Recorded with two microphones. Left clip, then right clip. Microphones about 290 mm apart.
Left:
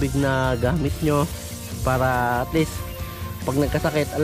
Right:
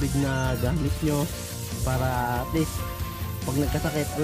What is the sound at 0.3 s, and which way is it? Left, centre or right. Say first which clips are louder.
Speech: left 6 dB; right.